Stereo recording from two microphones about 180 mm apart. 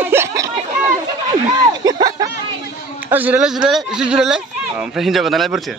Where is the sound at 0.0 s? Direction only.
15° right (ahead or behind).